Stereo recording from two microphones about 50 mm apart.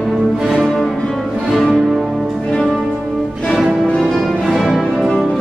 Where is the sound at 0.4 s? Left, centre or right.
Centre.